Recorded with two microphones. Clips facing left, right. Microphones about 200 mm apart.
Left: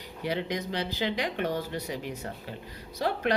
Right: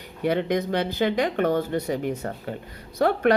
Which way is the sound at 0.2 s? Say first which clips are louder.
Right 8 dB; 55° right (ahead or behind).